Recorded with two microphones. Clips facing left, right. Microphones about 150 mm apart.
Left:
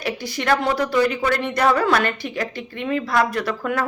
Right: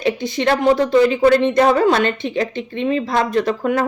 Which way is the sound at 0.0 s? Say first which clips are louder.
Right 7 dB; 20° right (ahead or behind).